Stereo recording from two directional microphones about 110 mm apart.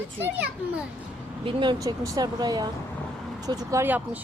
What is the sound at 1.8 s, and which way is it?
Speech, 30° right (ahead or behind).